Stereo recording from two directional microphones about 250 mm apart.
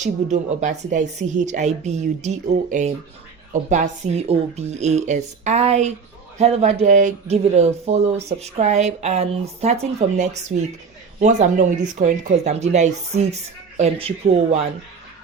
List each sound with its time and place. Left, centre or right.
0.0 s speech: right